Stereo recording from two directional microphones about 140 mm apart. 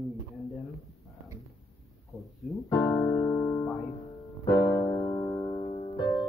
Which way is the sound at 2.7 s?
20° left (ahead or behind).